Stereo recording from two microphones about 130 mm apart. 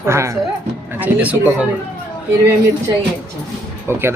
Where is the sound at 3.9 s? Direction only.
20° right (ahead or behind).